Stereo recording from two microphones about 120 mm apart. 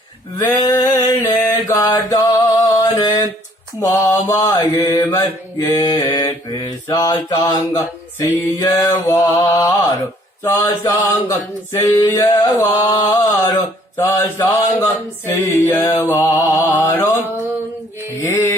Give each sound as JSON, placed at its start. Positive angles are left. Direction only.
{"t": 0.5, "sound": "mantra", "side_deg": 35}
{"t": 8.2, "sound": "a sound", "side_deg": 30}
{"t": 18.2, "sound": "music", "side_deg": 20}